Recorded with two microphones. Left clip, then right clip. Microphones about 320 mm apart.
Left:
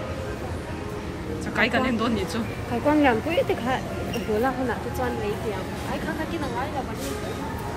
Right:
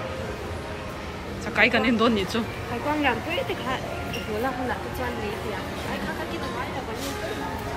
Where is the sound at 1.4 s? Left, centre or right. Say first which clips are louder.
Right 2 dB; centre.